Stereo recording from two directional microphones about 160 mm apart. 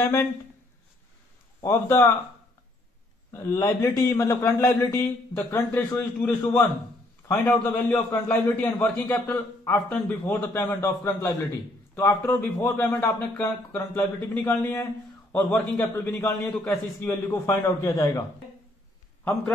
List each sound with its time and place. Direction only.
0.0 s speech: 20° left (ahead or behind)
1.6 s a man's voice: 15° left (ahead or behind)
3.3 s a man's voice: 20° left (ahead or behind)
17.1 s a man's voice: 15° left (ahead or behind)